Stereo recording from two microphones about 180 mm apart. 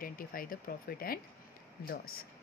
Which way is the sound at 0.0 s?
50° left (ahead or behind).